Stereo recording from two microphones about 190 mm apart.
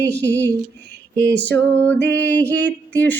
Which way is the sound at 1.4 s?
70° right (ahead or behind).